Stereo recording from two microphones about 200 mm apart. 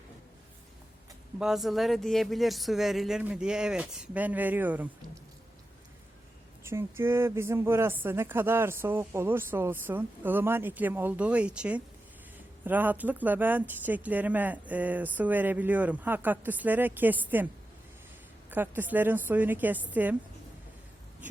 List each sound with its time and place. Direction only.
1.4 s speech: centre (ahead or behind)
6.6 s speech: 10° right (ahead or behind)
18.5 s speech: 10° right (ahead or behind)